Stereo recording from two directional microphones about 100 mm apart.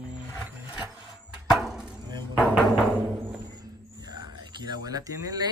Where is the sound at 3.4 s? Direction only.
40° right (ahead or behind).